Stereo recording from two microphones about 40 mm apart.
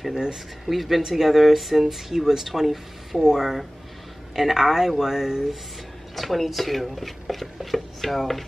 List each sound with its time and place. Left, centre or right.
0.1 s speech: centre
0.7 s speech: centre
6.1 s speech: centre